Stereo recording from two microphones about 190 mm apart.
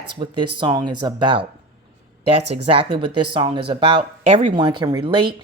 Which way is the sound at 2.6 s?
30° right (ahead or behind).